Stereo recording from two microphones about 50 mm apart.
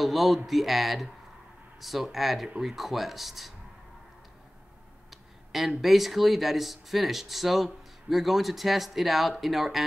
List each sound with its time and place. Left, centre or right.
0.0 s speech: centre
5.1 s speech: centre